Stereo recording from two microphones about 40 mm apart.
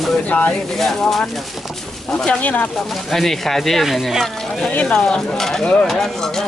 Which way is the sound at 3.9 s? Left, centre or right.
Centre.